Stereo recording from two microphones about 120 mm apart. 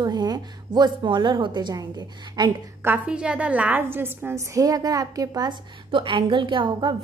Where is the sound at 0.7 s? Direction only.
40° right (ahead or behind).